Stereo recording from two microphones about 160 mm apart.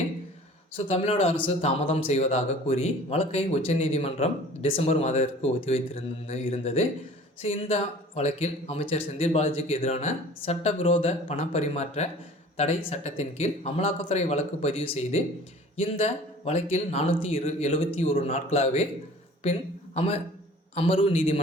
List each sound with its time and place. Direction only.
0.9 s a man's voice: 40° left (ahead or behind)
20.7 s speech: 35° left (ahead or behind)